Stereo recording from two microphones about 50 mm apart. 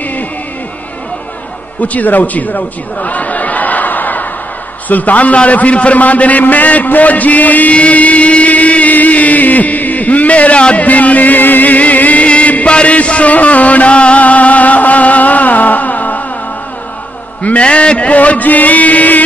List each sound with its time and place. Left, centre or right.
1.8 s a man's voice: left
12.7 s music: left
17.4 s a sound: left